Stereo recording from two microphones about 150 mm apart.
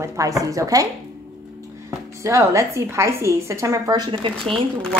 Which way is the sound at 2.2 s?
20° right (ahead or behind).